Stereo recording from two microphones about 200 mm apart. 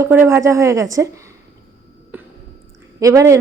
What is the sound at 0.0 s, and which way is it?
A woman's voice, 10° right (ahead or behind).